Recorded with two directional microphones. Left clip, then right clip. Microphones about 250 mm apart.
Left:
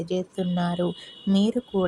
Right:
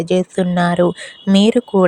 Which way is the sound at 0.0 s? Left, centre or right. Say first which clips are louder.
Right 11 dB; right.